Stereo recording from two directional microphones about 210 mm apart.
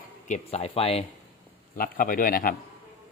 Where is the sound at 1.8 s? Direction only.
40° left (ahead or behind).